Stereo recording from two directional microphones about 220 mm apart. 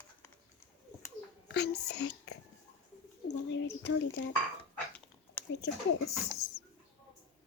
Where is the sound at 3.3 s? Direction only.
55° left (ahead or behind).